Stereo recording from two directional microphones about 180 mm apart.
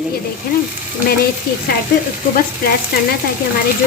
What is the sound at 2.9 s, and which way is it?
Frying, 60° left (ahead or behind).